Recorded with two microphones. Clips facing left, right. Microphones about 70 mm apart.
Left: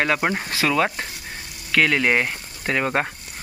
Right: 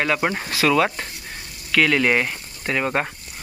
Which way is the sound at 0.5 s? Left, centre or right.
Left.